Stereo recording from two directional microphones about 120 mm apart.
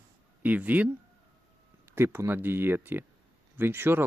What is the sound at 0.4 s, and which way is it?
Speech, 10° right (ahead or behind).